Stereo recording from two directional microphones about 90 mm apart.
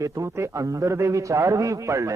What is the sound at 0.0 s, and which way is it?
A man's voice, 35° right (ahead or behind).